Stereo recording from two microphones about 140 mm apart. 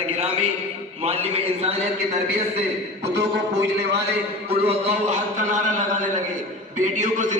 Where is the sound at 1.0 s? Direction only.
45° right (ahead or behind).